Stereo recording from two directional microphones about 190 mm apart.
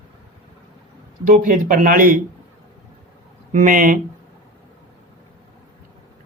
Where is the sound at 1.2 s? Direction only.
45° right (ahead or behind).